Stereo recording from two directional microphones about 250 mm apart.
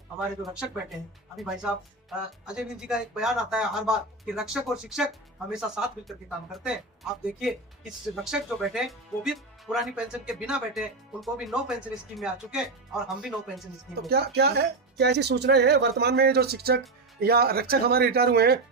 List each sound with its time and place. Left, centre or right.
0.5 s speech: centre
14.1 s speech: right